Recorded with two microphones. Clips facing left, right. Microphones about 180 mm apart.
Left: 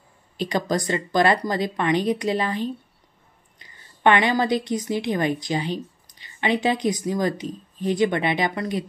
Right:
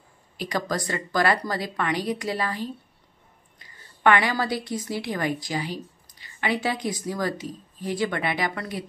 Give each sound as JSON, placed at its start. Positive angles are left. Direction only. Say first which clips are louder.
{"t": 0.4, "sound": "a woman's voice", "louder": "left 4 dB", "side_deg": 25}